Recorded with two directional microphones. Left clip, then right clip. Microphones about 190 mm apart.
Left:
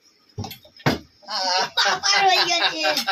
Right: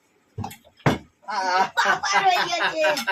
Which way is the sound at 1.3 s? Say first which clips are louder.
Right 1 dB; 15° right (ahead or behind).